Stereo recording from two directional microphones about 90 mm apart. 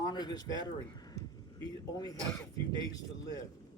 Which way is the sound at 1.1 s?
40° left (ahead or behind).